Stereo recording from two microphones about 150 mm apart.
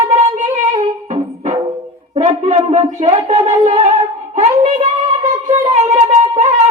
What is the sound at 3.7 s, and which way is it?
Music, 45° right (ahead or behind).